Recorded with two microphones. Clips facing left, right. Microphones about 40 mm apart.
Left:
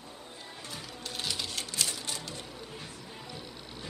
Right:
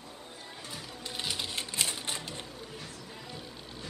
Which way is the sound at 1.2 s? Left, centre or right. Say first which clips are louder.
Right 1 dB; centre.